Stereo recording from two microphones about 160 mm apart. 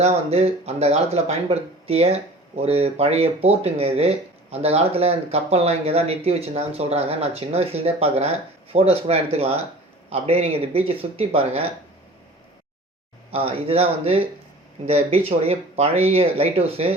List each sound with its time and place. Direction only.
0.0 s speech: 40° right (ahead or behind)
13.3 s speech: 35° right (ahead or behind)